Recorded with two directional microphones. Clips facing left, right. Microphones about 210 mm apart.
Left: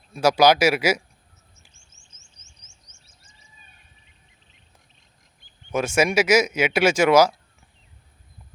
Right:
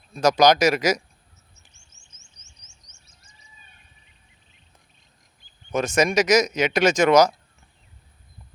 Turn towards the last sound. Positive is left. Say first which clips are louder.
# even
turn(degrees=5)  # may be behind; listen again after turning